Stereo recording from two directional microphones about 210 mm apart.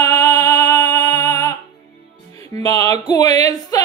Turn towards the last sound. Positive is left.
turn(degrees=15)  # may be behind; listen again after turning